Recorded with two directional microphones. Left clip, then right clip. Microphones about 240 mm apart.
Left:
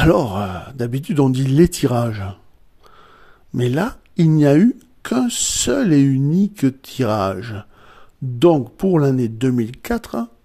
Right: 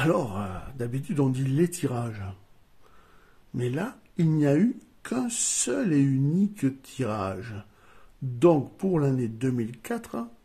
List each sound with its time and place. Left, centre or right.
0.0 s speech: left
3.5 s speech: left